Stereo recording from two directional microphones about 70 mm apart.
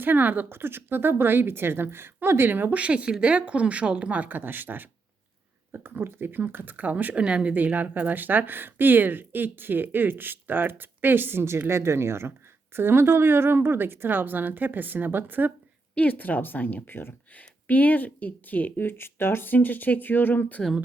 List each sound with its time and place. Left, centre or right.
0.0 s speech: right
16.0 s a woman's voice: left